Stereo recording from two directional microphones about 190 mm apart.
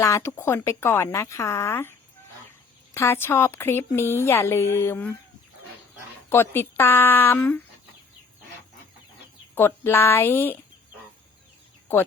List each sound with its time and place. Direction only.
0.0 s a woman's voice: 15° left (ahead or behind)
6.3 s a woman's voice: 10° left (ahead or behind)
9.6 s a woman's voice: 10° left (ahead or behind)